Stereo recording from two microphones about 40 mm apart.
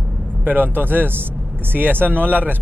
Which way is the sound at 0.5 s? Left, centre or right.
Right.